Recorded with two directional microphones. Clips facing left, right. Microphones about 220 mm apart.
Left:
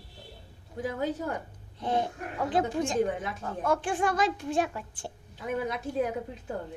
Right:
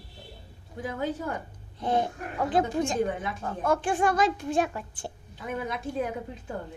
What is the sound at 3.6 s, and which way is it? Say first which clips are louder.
A woman's voice: right 2 dB; 45° right (ahead or behind).